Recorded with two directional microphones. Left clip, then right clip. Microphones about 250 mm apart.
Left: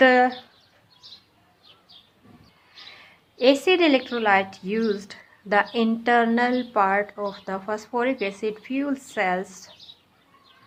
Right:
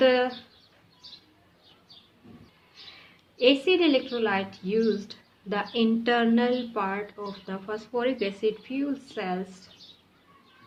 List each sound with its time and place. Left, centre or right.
3.3 s a woman's voice: left